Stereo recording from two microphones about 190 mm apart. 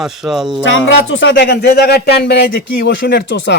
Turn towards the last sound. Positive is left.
turn(degrees=65)  # may be behind; listen again after turning